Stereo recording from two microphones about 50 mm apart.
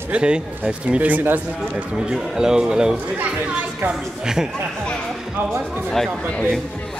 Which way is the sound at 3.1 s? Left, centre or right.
Right.